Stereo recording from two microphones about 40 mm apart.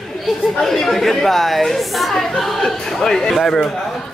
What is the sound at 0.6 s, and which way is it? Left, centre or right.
A woman's voice, centre.